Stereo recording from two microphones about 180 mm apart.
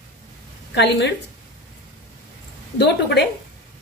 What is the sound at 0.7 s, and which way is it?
Speech, 70° left (ahead or behind).